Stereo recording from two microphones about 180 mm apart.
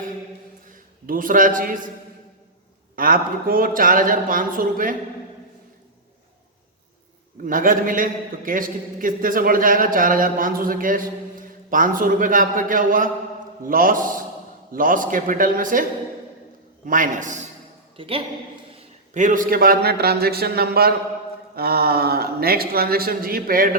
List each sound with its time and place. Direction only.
0.7 s a man's voice: 50° right (ahead or behind)
2.9 s a man's voice: 50° right (ahead or behind)
7.4 s a man's voice: 50° right (ahead or behind)
17.9 s a man's voice: 30° right (ahead or behind)
19.1 s speech: 45° right (ahead or behind)